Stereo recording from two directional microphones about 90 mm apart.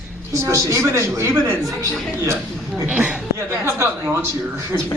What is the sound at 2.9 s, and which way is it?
Speech, 10° right (ahead or behind).